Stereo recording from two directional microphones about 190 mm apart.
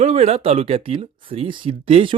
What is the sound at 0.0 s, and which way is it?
Speech, 35° right (ahead or behind).